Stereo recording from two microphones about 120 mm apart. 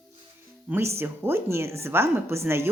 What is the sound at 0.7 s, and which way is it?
Speech, 20° right (ahead or behind).